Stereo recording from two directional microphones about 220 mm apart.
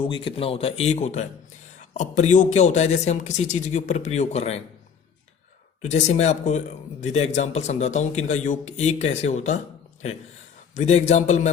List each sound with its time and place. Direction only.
0.0 s speech: 25° left (ahead or behind)
5.8 s speech: 30° left (ahead or behind)
10.8 s speech: 30° left (ahead or behind)